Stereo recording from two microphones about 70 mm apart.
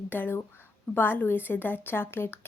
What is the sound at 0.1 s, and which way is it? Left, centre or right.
A woman's voice, left.